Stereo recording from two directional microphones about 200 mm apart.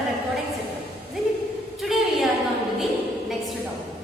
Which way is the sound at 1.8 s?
Centre (ahead or behind).